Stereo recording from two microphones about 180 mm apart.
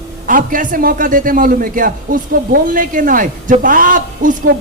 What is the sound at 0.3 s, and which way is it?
A man's voice, 50° right (ahead or behind).